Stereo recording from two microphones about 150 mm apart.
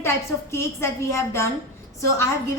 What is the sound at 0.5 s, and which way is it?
A woman's voice, 20° left (ahead or behind).